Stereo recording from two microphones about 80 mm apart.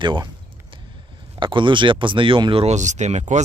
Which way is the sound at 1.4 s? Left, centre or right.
Right.